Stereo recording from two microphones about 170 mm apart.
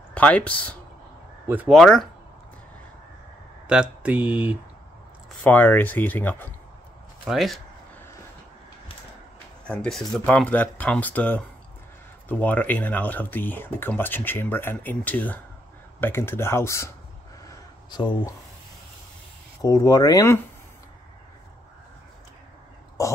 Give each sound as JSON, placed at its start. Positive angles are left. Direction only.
{"t": 0.1, "sound": "speech", "side_deg": 10}
{"t": 3.6, "sound": "speech", "side_deg": -5}
{"t": 5.4, "sound": "speech", "side_deg": 10}
{"t": 7.2, "sound": "speech", "side_deg": 0}
{"t": 9.7, "sound": "speech", "side_deg": 5}
{"t": 17.5, "sound": "a sound", "side_deg": 25}
{"t": 19.6, "sound": "speech", "side_deg": 20}
{"t": 23.0, "sound": "speech", "side_deg": 20}